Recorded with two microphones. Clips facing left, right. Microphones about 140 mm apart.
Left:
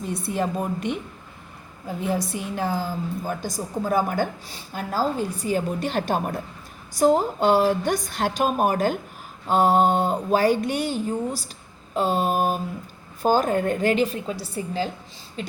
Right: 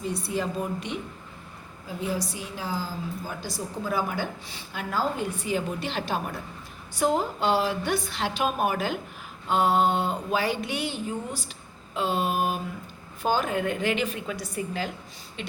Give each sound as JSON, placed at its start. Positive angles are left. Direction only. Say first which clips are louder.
{"t": 0.1, "sound": "a woman's voice", "louder": "left 5 dB", "side_deg": 50}
{"t": 2.0, "sound": "a woman's voice", "louder": "left 5 dB", "side_deg": 55}